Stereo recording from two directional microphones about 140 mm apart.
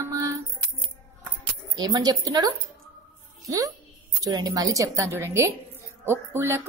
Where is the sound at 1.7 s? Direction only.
30° right (ahead or behind).